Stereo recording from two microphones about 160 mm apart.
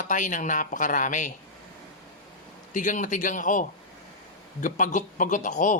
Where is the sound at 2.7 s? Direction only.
55° left (ahead or behind).